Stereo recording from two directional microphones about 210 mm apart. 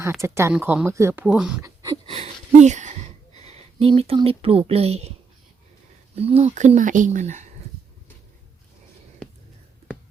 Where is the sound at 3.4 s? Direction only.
30° right (ahead or behind).